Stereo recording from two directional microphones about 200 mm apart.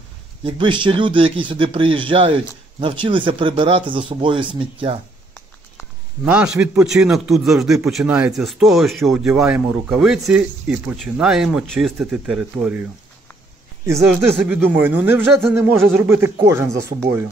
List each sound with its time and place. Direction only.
0.4 s speech: 25° right (ahead or behind)
6.2 s a man's voice: 5° right (ahead or behind)
13.8 s speech: 15° right (ahead or behind)